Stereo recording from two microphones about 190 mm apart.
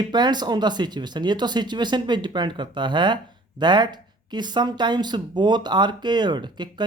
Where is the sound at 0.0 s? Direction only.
20° right (ahead or behind).